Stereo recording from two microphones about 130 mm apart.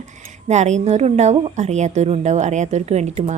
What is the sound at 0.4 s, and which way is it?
A woman's voice, 60° right (ahead or behind).